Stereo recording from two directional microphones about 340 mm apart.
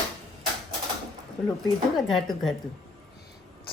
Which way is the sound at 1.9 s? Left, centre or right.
Centre.